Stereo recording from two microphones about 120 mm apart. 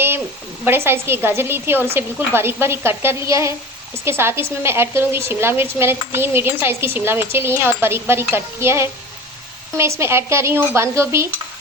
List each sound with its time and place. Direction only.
0.6 s a woman's voice: 20° right (ahead or behind)